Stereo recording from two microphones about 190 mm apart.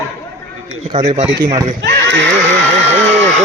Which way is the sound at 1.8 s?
70° right (ahead or behind).